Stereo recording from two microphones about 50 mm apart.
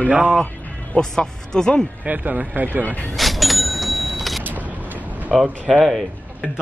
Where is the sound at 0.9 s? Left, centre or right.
Centre.